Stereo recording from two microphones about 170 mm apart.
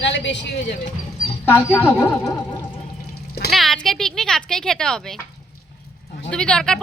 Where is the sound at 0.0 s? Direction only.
90° left.